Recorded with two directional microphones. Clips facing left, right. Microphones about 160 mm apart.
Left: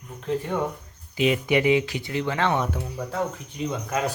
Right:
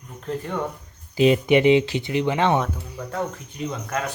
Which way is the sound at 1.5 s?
25° right (ahead or behind).